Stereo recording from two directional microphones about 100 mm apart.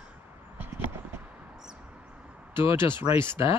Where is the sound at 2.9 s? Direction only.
20° right (ahead or behind).